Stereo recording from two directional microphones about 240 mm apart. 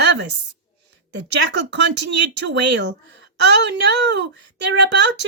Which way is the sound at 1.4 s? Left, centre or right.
Right.